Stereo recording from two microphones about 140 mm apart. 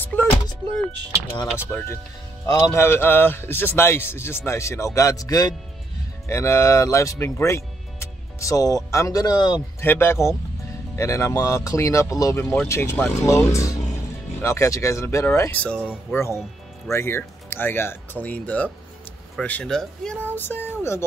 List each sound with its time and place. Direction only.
0.0 s music: 15° left (ahead or behind)
1.6 s a man's voice: 15° left (ahead or behind)
9.8 s a man's voice: 15° left (ahead or behind)